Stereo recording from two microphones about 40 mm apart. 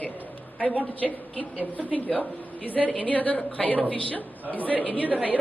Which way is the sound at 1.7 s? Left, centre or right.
Left.